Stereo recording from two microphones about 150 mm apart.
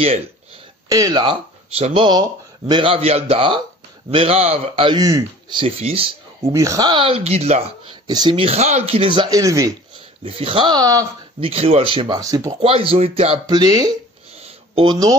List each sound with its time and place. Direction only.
0.8 s speech: 25° right (ahead or behind)
5.6 s speech: 40° right (ahead or behind)
6.4 s speech: 20° right (ahead or behind); by 7.9 s 45° right (ahead or behind)
7.9 s speech: 30° right (ahead or behind)
10.2 s speech: 40° right (ahead or behind)
11.3 s speech: 40° right (ahead or behind)
12.2 s speech: 20° right (ahead or behind)
12.6 s speech: 40° right (ahead or behind)
13.5 s speech: 25° right (ahead or behind)
14.3 s a sound: 45° right (ahead or behind)
14.9 s speech: 25° right (ahead or behind)